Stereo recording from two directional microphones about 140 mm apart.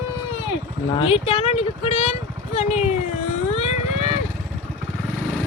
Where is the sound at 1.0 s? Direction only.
45° left (ahead or behind).